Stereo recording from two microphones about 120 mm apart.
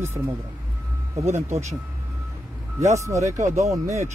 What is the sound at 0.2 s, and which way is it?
Speech, 40° right (ahead or behind).